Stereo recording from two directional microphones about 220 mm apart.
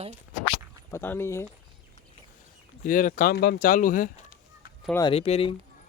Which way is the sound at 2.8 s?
35° left (ahead or behind).